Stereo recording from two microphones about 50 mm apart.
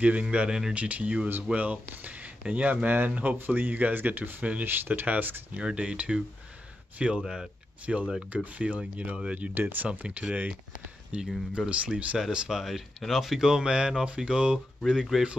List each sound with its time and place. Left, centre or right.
0.0 s speech: right
4.6 s speech: right
5.0 s speech: right
5.6 s speech: centre
7.8 s speech: right
9.5 s speech: right
9.8 s speech: right
11.1 s speech: centre
12.4 s speech: centre
14.9 s speech: centre